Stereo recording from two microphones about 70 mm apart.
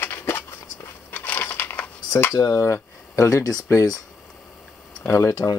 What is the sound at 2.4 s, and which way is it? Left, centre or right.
Speech, left.